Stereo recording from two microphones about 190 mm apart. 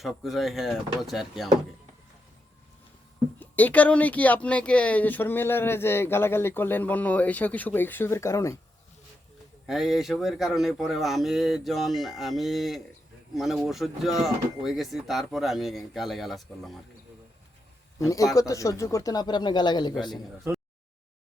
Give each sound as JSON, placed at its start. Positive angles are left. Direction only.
{"t": 0.0, "sound": "speech", "side_deg": 0}
{"t": 3.4, "sound": "speech", "side_deg": 10}
{"t": 9.6, "sound": "speech", "side_deg": 0}
{"t": 18.0, "sound": "speech", "side_deg": 15}